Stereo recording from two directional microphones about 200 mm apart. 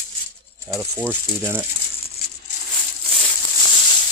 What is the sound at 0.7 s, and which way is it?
Speech, 10° right (ahead or behind).